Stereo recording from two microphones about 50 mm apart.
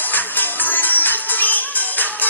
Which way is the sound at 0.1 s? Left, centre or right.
Left.